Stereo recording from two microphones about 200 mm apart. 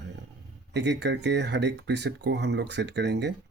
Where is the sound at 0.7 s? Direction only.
60° right (ahead or behind).